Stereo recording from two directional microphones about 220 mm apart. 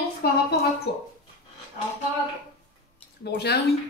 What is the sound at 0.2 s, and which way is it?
Speech, 45° left (ahead or behind).